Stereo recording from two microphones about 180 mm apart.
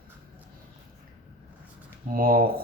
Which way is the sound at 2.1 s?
55° right (ahead or behind).